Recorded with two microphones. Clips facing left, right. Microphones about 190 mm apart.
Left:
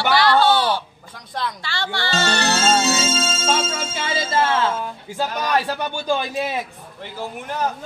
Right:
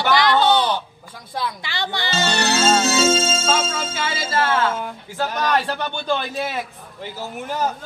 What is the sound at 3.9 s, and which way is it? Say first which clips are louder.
Speech: left 3 dB; 20° left (ahead or behind).